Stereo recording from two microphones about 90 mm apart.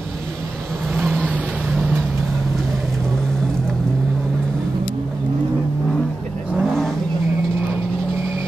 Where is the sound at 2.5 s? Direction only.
Centre (ahead or behind).